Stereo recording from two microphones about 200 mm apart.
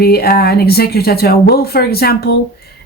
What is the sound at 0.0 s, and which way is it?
Speech, 50° left (ahead or behind).